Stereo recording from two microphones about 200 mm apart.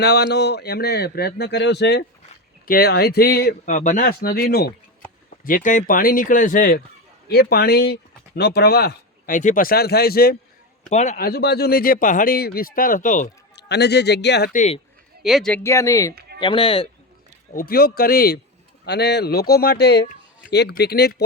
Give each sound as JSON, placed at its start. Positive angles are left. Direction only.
{"t": 0.0, "sound": "speech", "side_deg": 55}
{"t": 10.8, "sound": "a man's voice", "side_deg": 35}
{"t": 11.3, "sound": "speech", "side_deg": 55}
{"t": 13.6, "sound": "speech", "side_deg": 55}
{"t": 14.5, "sound": "a man's voice", "side_deg": 35}
{"t": 15.2, "sound": "speech", "side_deg": 0}
{"t": 16.4, "sound": "speech", "side_deg": 25}
{"t": 17.5, "sound": "speech", "side_deg": 45}